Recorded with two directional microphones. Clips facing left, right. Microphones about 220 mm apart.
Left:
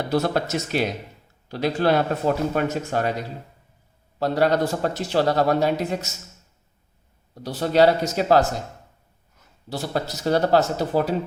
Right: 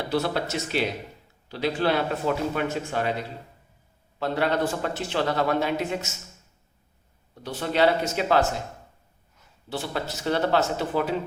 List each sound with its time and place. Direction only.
0.1 s speech: 45° left (ahead or behind)
4.2 s speech: 40° left (ahead or behind)
7.3 s speech: 40° left (ahead or behind)
9.6 s speech: 40° left (ahead or behind)